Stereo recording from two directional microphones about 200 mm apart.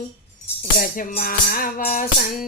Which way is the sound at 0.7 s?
50° left (ahead or behind).